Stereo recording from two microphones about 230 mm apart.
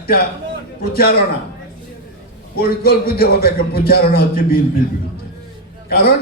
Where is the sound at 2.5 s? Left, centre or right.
Left.